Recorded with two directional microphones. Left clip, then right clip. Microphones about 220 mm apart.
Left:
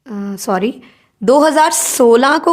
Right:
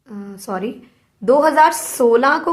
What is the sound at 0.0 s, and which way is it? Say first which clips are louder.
A woman's voice: left 10 dB; 50° left (ahead or behind).